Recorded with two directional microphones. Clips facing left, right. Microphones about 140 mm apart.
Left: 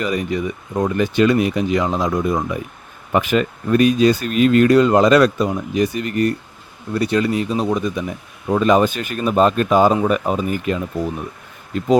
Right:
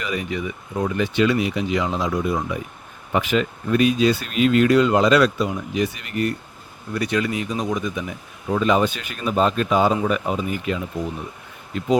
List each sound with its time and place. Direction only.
0.0 s speech: 40° left (ahead or behind)
8.4 s speech: 45° left (ahead or behind)